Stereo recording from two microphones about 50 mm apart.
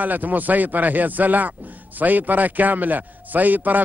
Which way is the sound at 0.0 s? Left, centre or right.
Right.